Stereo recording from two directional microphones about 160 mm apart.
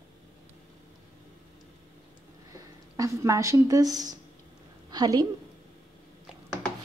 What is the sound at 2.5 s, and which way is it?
A woman's voice, 20° right (ahead or behind).